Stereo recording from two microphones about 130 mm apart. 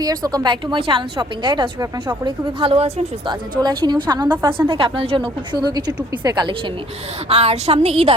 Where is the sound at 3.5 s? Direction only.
35° right (ahead or behind).